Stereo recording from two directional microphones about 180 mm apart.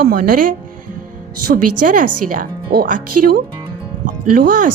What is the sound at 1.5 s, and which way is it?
Speech, 50° right (ahead or behind).